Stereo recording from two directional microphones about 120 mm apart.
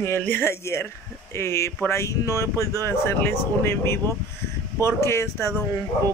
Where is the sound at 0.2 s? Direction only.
20° left (ahead or behind).